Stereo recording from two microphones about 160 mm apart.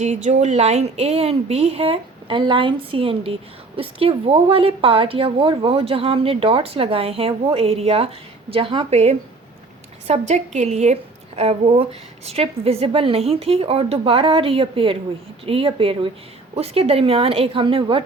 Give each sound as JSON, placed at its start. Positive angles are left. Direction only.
{"t": 0.0, "sound": "a woman's voice", "side_deg": -45}